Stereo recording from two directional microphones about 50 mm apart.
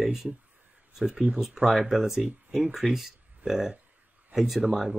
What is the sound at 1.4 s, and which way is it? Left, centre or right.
Speech, centre.